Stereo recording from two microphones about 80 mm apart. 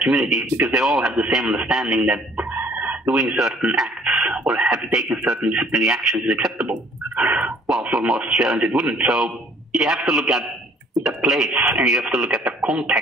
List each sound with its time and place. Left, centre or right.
0.0 s speech: centre
2.3 s chicken: right
3.2 s speech: centre
4.0 s a sound: centre
4.3 s speech: centre